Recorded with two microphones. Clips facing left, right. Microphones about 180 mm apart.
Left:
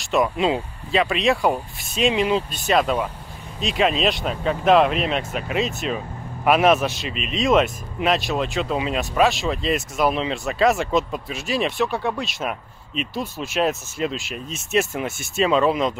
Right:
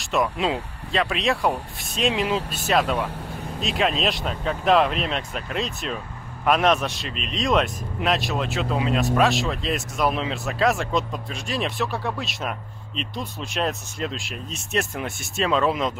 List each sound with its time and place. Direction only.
0.1 s speech: centre (ahead or behind)